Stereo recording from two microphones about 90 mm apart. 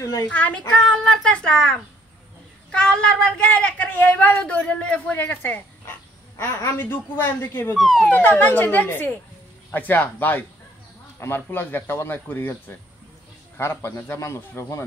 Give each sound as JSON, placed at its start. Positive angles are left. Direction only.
{"t": 0.0, "sound": "speech", "side_deg": 35}
{"t": 0.3, "sound": "a woman's voice", "side_deg": 15}
{"t": 0.8, "sound": "a woman's voice", "side_deg": 0}
{"t": 6.3, "sound": "speech", "side_deg": 30}
{"t": 7.7, "sound": "speech", "side_deg": 0}
{"t": 8.1, "sound": "speech", "side_deg": 20}